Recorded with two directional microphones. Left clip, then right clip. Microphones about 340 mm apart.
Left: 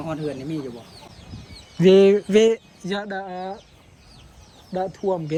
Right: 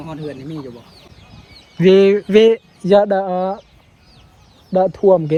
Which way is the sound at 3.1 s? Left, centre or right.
Right.